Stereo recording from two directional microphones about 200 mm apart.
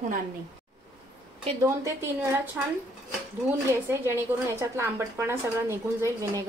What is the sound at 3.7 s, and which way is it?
Speech, 10° right (ahead or behind).